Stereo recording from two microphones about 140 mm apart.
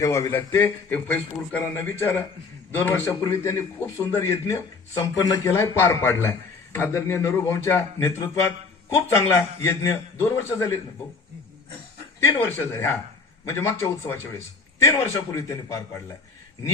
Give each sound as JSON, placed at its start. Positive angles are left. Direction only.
{"t": 0.0, "sound": "a man's voice", "side_deg": 20}
{"t": 12.4, "sound": "a man's voice", "side_deg": 15}